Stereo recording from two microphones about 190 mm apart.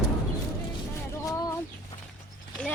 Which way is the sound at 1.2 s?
15° left (ahead or behind).